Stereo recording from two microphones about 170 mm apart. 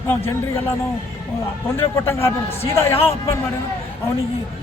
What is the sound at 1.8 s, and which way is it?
A man's voice, 15° left (ahead or behind).